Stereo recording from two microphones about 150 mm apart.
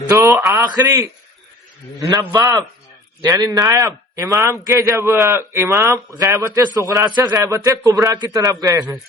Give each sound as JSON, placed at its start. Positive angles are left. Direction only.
{"t": 0.4, "sound": "a man's voice", "side_deg": -20}